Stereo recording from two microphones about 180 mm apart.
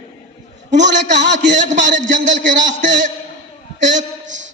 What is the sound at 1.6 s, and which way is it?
A man's voice, 45° right (ahead or behind).